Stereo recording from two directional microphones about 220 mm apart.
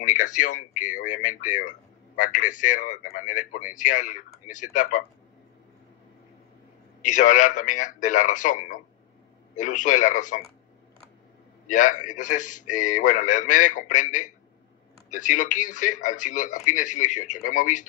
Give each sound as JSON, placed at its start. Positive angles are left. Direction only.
{"t": 0.0, "sound": "speech", "side_deg": 35}
{"t": 7.0, "sound": "speech", "side_deg": 35}
{"t": 11.6, "sound": "speech", "side_deg": 35}